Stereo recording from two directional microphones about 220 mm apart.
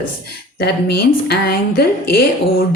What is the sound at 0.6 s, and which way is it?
A woman's voice, 45° left (ahead or behind).